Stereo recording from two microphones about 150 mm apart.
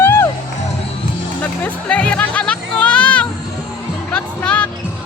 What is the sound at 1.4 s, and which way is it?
Music, 10° left (ahead or behind).